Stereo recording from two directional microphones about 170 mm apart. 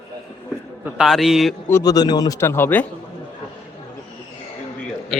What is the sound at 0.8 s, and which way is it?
Speech, centre (ahead or behind).